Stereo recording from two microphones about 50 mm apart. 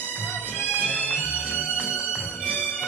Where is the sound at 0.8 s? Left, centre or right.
Left.